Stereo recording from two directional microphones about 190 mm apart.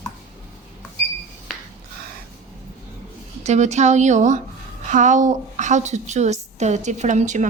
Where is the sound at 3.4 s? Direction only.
35° right (ahead or behind).